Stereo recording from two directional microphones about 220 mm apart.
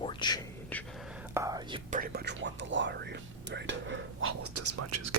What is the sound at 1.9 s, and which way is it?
Speech, 40° right (ahead or behind).